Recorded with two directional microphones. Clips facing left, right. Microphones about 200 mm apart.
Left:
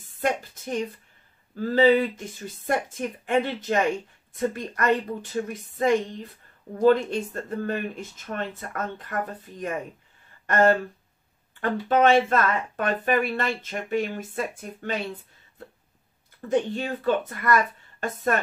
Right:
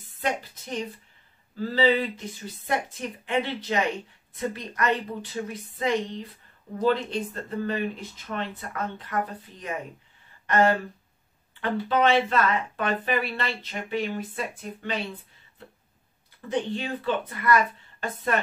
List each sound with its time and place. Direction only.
0.2 s speech: 50° left (ahead or behind)
16.3 s speech: 45° left (ahead or behind)